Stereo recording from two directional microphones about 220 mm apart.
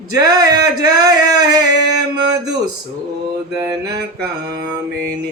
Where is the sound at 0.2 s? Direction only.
15° right (ahead or behind).